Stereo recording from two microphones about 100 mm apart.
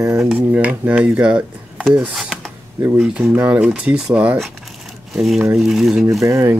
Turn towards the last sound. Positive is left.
turn(degrees=-30)  # may be behind; listen again after turning